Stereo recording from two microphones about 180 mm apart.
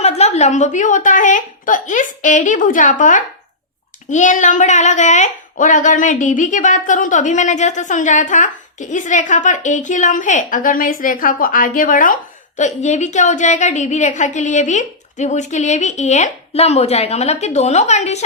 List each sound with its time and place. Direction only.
0.0 s a woman's voice: 35° left (ahead or behind)